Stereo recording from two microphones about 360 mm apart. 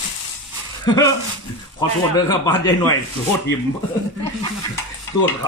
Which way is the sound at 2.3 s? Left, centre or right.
Centre.